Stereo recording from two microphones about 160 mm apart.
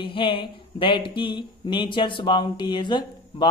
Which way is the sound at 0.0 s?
30° left (ahead or behind).